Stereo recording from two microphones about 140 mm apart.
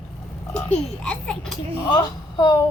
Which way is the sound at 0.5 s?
10° left (ahead or behind).